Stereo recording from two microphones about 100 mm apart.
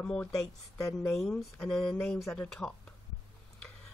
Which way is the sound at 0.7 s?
35° left (ahead or behind).